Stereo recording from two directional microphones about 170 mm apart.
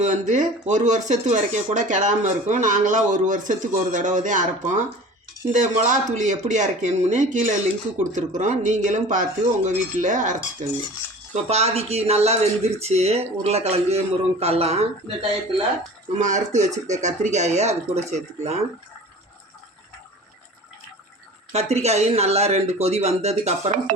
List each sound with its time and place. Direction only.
0.0 s a man's voice: 45° right (ahead or behind)
16.1 s a man's voice: 45° right (ahead or behind)
21.5 s a man's voice: 40° right (ahead or behind)